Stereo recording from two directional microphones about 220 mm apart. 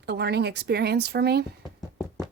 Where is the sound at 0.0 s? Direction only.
50° right (ahead or behind).